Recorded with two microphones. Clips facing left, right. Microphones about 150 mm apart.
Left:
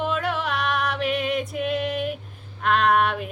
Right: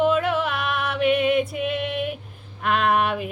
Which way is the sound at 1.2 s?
5° right (ahead or behind).